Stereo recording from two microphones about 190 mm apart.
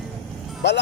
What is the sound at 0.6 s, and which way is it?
Speech, 65° left (ahead or behind).